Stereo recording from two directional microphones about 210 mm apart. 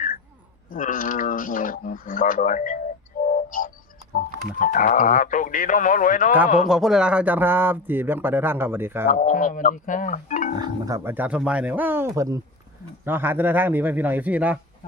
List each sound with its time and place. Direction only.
0.7 s speech: 40° left (ahead or behind)
6.7 s speech: centre (ahead or behind)
9.0 s speech: 40° left (ahead or behind)
10.6 s speech: 15° right (ahead or behind)